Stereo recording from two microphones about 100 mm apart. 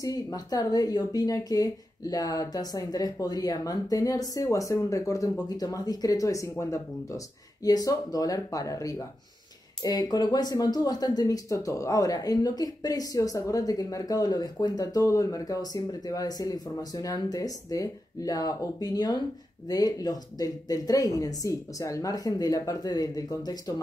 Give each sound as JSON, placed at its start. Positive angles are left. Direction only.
{"t": 0.0, "sound": "speech", "side_deg": 40}